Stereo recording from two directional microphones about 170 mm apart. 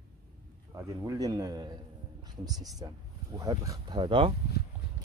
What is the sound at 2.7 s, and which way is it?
Speech, 20° right (ahead or behind).